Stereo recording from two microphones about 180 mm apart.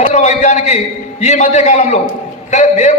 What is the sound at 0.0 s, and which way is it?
A man's voice, 40° left (ahead or behind).